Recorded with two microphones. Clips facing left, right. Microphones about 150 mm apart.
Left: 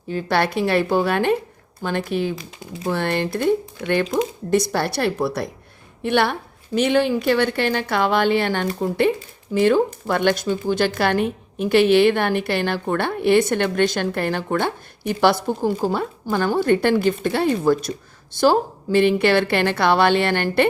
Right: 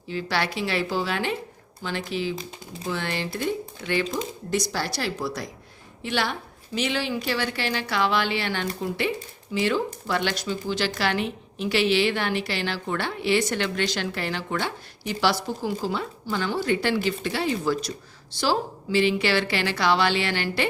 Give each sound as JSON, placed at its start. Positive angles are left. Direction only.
{"t": 0.1, "sound": "a woman's voice", "side_deg": 50}